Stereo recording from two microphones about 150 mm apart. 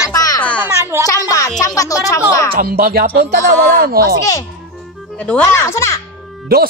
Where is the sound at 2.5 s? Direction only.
80° right.